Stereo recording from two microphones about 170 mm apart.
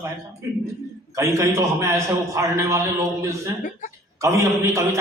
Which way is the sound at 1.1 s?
15° right (ahead or behind).